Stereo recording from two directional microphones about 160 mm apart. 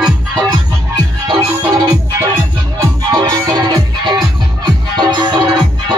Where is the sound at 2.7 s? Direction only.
20° right (ahead or behind).